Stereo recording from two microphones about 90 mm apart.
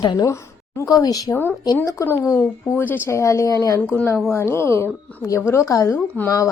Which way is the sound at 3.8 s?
15° left (ahead or behind).